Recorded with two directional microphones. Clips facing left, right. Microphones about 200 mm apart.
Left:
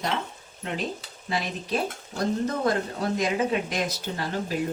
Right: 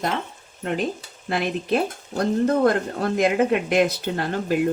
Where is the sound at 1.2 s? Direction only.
60° right (ahead or behind).